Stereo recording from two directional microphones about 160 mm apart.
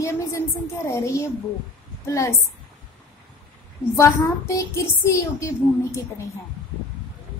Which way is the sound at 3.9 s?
20° left (ahead or behind).